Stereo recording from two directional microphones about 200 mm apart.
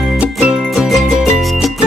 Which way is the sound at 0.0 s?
5° right (ahead or behind).